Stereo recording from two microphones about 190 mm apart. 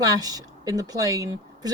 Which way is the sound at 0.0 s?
20° right (ahead or behind).